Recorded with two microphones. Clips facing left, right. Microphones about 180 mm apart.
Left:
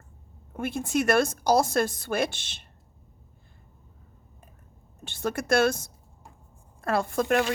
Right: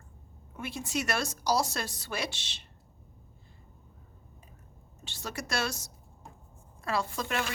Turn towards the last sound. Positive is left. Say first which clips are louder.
# left 9 dB
turn(degrees=55)  # may be behind; listen again after turning